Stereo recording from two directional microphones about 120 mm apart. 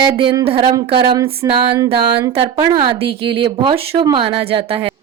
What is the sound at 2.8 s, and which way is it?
A woman's voice, 45° right (ahead or behind).